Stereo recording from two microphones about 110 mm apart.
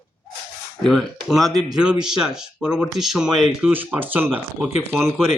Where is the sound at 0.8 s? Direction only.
Centre (ahead or behind).